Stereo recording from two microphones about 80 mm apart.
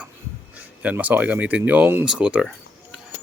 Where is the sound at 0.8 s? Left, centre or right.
Centre.